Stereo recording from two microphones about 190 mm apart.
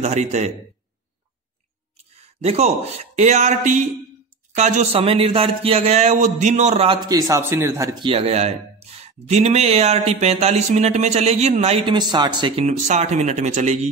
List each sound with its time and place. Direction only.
0.0 s speech: 35° right (ahead or behind)
2.1 s speech: 35° right (ahead or behind); by 7.9 s 15° right (ahead or behind)
8.0 s speech: 30° right (ahead or behind)
12.6 s speech: 35° right (ahead or behind)